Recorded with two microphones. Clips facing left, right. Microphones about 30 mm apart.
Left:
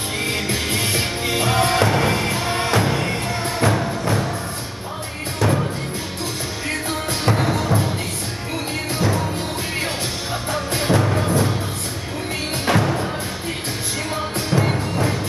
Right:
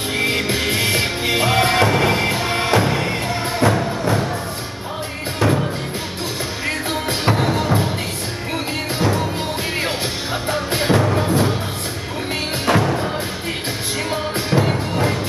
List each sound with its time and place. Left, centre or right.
0.2 s music: right
5.4 s music: centre
6.9 s music: centre
9.0 s music: centre
10.5 s music: centre
12.6 s music: centre
14.1 s music: centre